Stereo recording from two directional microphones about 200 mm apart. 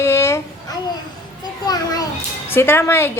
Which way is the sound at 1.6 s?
20° left (ahead or behind).